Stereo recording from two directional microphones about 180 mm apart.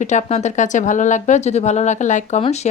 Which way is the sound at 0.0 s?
40° left (ahead or behind).